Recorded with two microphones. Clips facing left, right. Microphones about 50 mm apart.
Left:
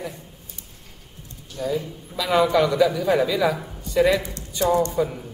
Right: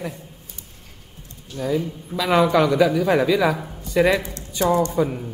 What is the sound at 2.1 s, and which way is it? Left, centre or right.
A man's voice, right.